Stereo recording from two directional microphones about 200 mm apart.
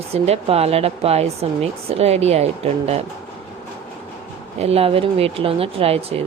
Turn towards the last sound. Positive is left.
turn(degrees=-30)  # may be behind; listen again after turning